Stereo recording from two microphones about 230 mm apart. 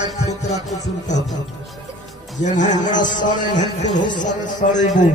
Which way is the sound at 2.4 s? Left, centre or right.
Left.